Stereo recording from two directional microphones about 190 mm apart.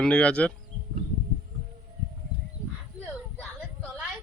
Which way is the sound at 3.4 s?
5° left (ahead or behind).